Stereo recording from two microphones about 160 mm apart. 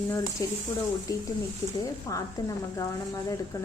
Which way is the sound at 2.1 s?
20° left (ahead or behind).